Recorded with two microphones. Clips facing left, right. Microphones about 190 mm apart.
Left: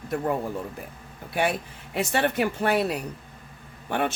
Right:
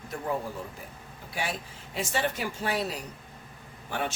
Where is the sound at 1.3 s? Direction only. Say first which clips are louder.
Left 8 dB; 60° left (ahead or behind).